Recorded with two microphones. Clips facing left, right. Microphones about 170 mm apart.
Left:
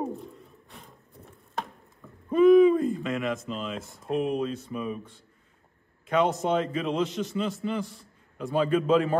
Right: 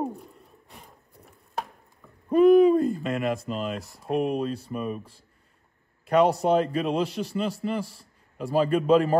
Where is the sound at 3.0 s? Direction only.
35° right (ahead or behind).